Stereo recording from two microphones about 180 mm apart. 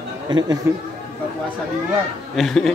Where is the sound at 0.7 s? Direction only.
10° right (ahead or behind).